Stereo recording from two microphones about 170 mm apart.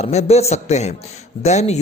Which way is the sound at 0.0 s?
40° left (ahead or behind).